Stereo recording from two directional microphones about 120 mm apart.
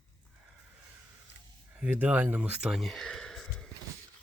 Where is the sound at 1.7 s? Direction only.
10° right (ahead or behind).